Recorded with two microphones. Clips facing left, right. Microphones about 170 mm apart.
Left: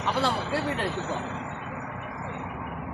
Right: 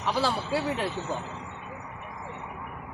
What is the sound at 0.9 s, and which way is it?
Vehicle, 65° left (ahead or behind).